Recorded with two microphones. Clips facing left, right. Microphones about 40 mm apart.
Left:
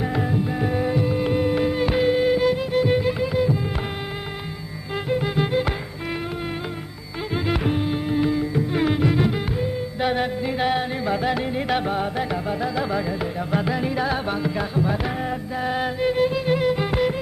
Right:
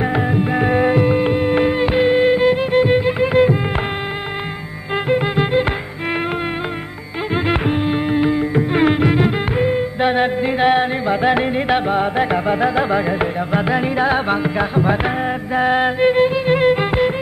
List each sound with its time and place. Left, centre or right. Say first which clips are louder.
0.0 s music: right 6 dB; right
5.1 s music: right 5 dB; right
7.3 s music: right 5 dB; right